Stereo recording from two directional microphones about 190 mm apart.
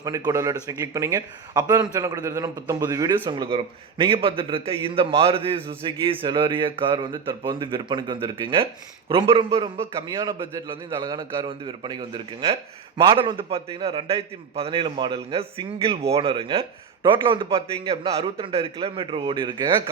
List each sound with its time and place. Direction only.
0.3 s a man's voice: 20° right (ahead or behind)